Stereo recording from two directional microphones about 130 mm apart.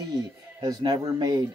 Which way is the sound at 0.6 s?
35° right (ahead or behind).